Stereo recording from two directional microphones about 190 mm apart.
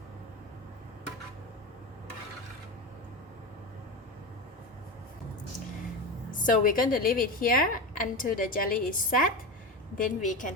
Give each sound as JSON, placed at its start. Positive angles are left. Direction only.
{"t": 6.4, "sound": "a woman's voice", "side_deg": 45}